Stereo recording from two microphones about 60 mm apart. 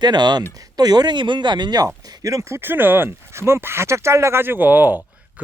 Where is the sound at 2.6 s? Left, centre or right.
Right.